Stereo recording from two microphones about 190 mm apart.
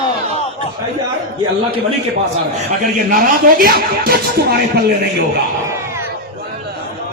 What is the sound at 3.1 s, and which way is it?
Speech, 50° right (ahead or behind).